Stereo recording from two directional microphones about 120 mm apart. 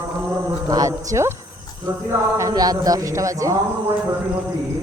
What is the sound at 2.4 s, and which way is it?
Mantra, 30° right (ahead or behind).